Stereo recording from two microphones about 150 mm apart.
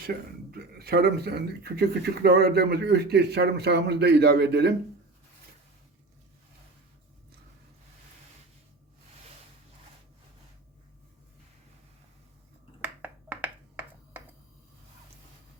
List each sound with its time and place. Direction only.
0.0 s speech: 90° right
12.8 s finger snapping: 10° right (ahead or behind)